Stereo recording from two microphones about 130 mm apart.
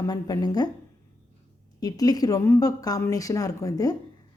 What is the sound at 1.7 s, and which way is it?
A woman's voice, 30° left (ahead or behind).